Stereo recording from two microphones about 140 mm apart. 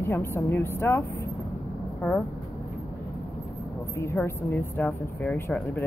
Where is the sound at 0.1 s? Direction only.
15° left (ahead or behind).